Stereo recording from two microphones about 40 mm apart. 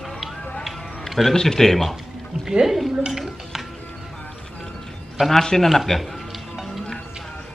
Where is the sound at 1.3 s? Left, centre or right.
Centre.